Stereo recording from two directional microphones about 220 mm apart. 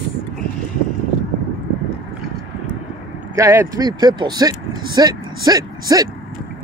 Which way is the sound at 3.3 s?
15° right (ahead or behind).